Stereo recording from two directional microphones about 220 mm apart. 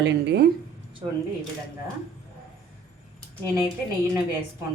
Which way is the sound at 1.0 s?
20° right (ahead or behind).